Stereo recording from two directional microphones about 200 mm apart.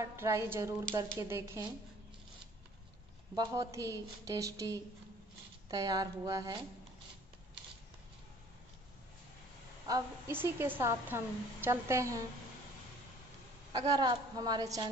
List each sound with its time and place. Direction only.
0.0 s a woman's voice: 15° right (ahead or behind)
3.3 s a woman's voice: 15° right (ahead or behind)
9.8 s a woman's voice: 15° right (ahead or behind)
13.7 s a woman's voice: 20° right (ahead or behind)